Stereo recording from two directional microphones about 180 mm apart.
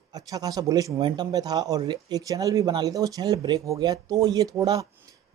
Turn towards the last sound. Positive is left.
turn(degrees=-20)  # may be behind; listen again after turning